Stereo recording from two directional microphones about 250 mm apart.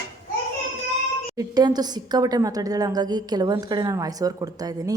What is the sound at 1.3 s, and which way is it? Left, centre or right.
A woman's voice, centre.